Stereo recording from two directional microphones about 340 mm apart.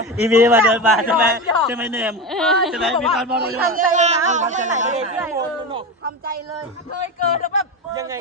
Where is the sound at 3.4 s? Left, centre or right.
Right.